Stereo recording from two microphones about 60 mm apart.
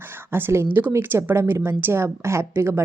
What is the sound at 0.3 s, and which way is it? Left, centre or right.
A woman's voice, right.